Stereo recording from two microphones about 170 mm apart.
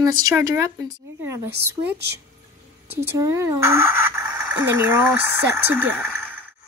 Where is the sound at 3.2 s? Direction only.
15° right (ahead or behind).